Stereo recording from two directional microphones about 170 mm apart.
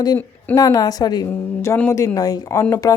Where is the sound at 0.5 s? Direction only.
20° left (ahead or behind).